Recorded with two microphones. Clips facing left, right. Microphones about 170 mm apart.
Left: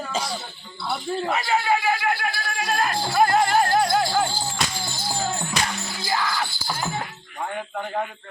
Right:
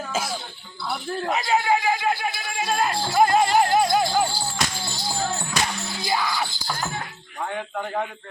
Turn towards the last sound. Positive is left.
turn(degrees=-15)  # may be behind; listen again after turning